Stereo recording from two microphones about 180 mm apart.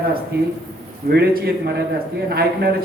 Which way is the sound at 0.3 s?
60° right (ahead or behind).